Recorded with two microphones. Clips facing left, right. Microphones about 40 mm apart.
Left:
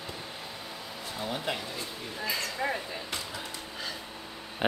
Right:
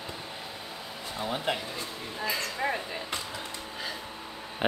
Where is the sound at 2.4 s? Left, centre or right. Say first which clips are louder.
Even; centre.